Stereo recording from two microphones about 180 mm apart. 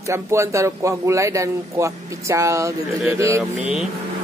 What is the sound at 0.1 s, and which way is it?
A man's voice, 15° right (ahead or behind).